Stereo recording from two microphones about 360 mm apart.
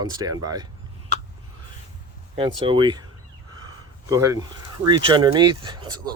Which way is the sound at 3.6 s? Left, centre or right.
Centre.